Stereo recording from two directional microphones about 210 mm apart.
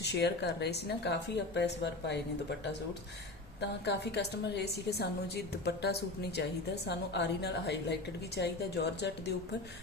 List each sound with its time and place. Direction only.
0.0 s a woman's voice: 50° left (ahead or behind)
3.6 s a woman's voice: 55° left (ahead or behind)